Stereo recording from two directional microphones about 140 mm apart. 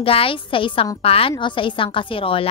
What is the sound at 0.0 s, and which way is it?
A woman's voice, 40° left (ahead or behind).